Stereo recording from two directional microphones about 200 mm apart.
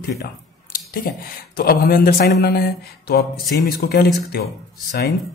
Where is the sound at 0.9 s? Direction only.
45° left (ahead or behind).